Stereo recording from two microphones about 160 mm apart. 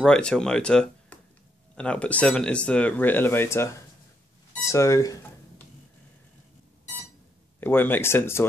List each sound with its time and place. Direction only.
0.0 s speech: 5° left (ahead or behind); by 5.2 s 20° left (ahead or behind)
7.6 s speech: 10° left (ahead or behind)